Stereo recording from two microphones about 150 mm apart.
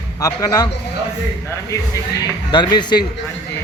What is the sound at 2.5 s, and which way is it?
Speech, 30° left (ahead or behind).